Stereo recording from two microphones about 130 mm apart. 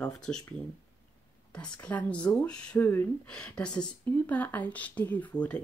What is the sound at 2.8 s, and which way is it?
Speech, 20° left (ahead or behind).